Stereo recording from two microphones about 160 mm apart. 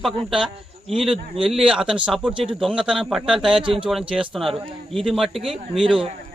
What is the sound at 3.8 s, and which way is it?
A man's voice, 5° right (ahead or behind).